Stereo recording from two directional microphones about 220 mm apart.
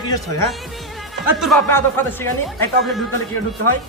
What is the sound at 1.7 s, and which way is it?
Speech, 10° left (ahead or behind).